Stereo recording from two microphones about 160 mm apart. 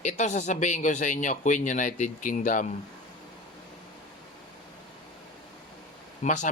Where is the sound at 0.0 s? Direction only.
45° left (ahead or behind).